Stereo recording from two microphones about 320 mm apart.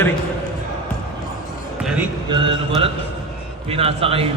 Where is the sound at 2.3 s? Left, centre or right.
Centre.